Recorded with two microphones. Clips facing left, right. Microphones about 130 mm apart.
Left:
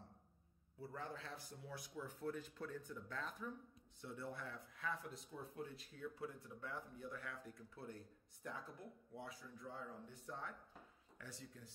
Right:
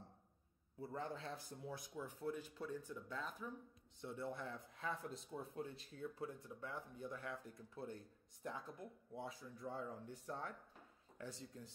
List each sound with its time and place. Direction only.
0.7 s speech: 25° right (ahead or behind); by 3.5 s 5° right (ahead or behind)
4.0 s speech: 25° right (ahead or behind)
9.8 s speech: 45° right (ahead or behind)
11.1 s speech: 25° right (ahead or behind)